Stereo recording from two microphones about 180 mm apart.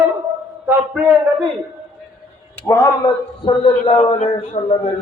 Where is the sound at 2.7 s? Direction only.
20° left (ahead or behind).